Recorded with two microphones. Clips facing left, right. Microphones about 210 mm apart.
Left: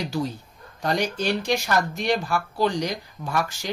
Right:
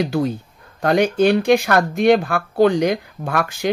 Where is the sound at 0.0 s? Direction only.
55° right (ahead or behind).